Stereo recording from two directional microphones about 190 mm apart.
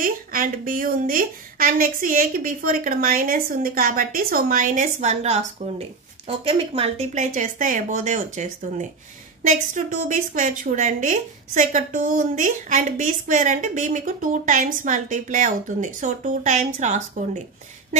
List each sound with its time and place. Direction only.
0.0 s a woman's voice: 45° right (ahead or behind)